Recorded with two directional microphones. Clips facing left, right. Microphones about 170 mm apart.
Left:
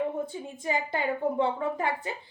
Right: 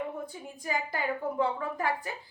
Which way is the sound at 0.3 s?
25° left (ahead or behind).